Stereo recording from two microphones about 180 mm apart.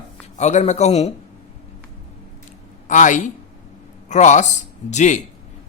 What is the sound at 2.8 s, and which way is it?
Speech, 45° left (ahead or behind).